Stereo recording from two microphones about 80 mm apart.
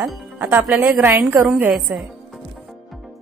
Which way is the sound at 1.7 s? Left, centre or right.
Centre.